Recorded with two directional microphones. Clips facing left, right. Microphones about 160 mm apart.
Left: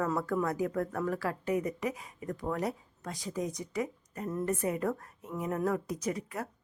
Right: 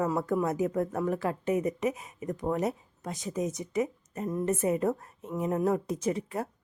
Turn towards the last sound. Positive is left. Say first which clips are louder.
# right 4 dB
turn(degrees=-25)  # may be behind; listen again after turning